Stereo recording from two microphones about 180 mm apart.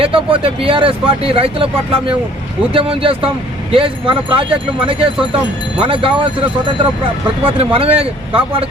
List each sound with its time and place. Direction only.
0.0 s speech: 30° right (ahead or behind)
7.6 s speech: 30° right (ahead or behind)